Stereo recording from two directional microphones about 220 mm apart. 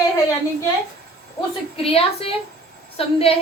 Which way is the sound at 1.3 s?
25° left (ahead or behind).